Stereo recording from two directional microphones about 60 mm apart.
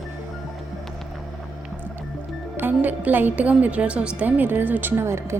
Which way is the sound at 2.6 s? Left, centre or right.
Right.